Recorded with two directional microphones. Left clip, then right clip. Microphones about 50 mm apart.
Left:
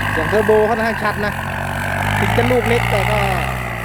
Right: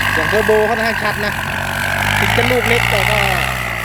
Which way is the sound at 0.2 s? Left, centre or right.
Centre.